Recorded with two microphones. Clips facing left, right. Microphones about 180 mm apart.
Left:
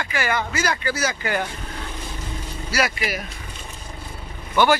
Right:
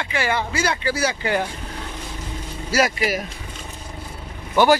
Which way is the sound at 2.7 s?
40° right (ahead or behind).